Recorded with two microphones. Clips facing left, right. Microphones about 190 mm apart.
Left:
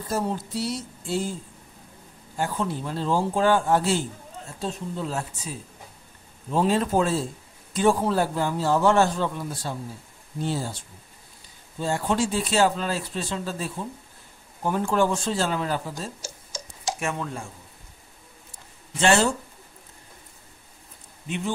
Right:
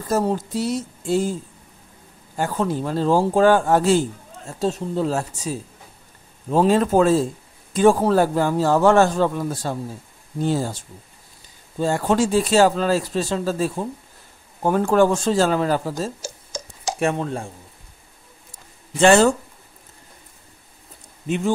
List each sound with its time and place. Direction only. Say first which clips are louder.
0.1 s speech: right 6 dB; 45° right (ahead or behind)
2.3 s speech: right 5 dB; 50° right (ahead or behind)
6.5 s a man's voice: right 6 dB; 45° right (ahead or behind)
11.8 s speech: right 5 dB; 50° right (ahead or behind)
14.6 s speech: right 6 dB; 55° right (ahead or behind); by 17.5 s 35° right (ahead or behind)
18.9 s speech: right 7 dB; 50° right (ahead or behind)